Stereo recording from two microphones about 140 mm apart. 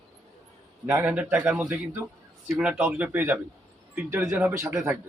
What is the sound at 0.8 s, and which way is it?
A man's voice, 15° right (ahead or behind).